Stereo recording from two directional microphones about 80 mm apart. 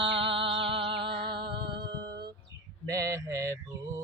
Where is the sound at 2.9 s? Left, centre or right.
Right.